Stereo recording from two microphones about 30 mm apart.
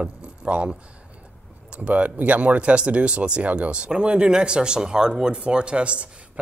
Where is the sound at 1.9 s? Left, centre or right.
Right.